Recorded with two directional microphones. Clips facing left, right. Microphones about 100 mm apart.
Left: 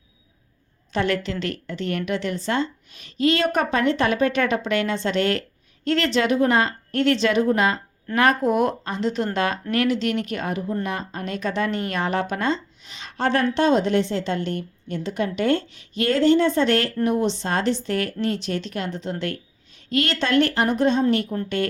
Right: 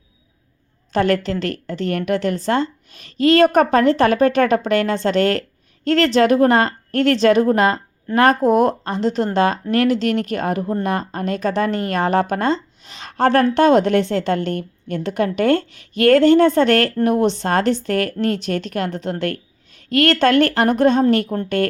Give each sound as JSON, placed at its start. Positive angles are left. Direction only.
{"t": 0.9, "sound": "a woman's voice", "side_deg": -45}